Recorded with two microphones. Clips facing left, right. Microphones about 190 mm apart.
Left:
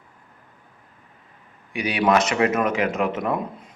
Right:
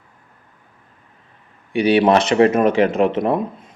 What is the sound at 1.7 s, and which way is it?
Speech, 30° right (ahead or behind).